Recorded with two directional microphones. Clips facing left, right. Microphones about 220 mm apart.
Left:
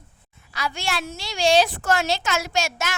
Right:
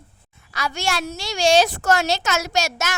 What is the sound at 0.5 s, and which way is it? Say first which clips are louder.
A woman's voice: right 3 dB; 45° right (ahead or behind).